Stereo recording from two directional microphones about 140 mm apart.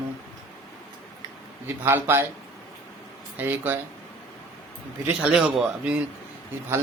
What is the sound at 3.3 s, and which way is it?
Speech, 15° right (ahead or behind).